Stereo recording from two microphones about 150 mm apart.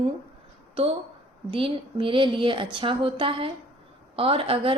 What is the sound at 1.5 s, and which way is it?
A woman's voice, 35° right (ahead or behind).